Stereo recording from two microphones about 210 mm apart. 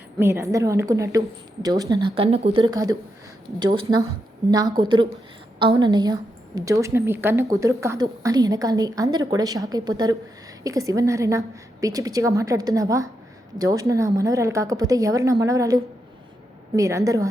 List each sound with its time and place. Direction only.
0.2 s speech: 10° right (ahead or behind)
2.1 s speech: 30° right (ahead or behind)